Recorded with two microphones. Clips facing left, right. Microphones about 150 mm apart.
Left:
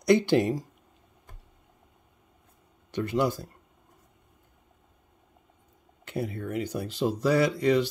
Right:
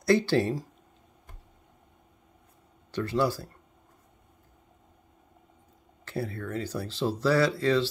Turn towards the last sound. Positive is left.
turn(degrees=15)  # may be behind; listen again after turning